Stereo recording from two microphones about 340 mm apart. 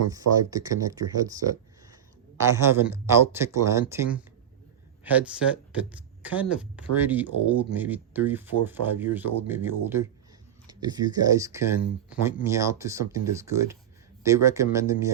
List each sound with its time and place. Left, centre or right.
0.1 s speech: centre
2.6 s speech: centre
11.8 s speech: left
12.2 s speech: centre